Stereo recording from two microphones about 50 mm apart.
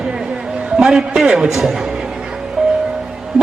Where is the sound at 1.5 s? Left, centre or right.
Centre.